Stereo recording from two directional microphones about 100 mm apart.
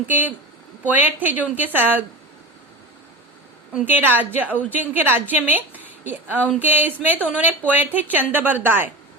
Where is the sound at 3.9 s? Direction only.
20° right (ahead or behind).